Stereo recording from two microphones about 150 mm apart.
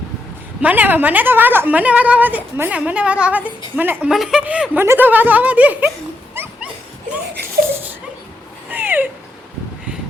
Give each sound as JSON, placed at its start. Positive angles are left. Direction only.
{"t": 0.6, "sound": "a woman's voice", "side_deg": -10}
{"t": 6.3, "sound": "dog", "side_deg": -15}
{"t": 8.7, "sound": "a sound", "side_deg": -15}